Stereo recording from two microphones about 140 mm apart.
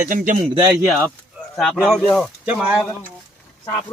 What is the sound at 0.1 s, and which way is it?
Speech, 65° right (ahead or behind).